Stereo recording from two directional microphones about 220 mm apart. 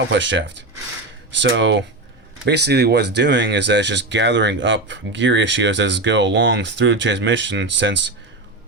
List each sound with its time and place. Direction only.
0.1 s speech: 55° right (ahead or behind)